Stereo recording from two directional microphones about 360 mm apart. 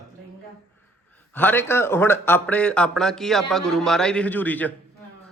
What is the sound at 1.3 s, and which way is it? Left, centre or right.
Mantra, centre.